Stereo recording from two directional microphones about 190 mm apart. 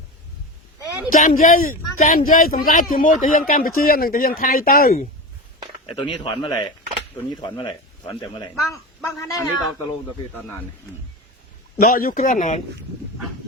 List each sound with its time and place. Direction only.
1.1 s speech: 45° left (ahead or behind)
5.8 s speech: 25° left (ahead or behind)
11.8 s speech: 45° left (ahead or behind)